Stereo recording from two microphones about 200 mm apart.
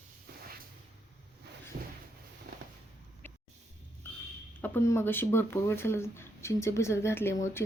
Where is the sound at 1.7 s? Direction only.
45° right (ahead or behind).